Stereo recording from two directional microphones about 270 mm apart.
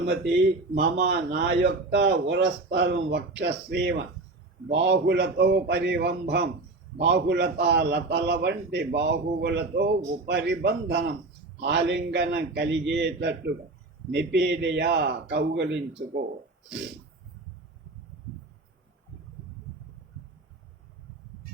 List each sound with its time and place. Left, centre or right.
0.7 s a man's voice: right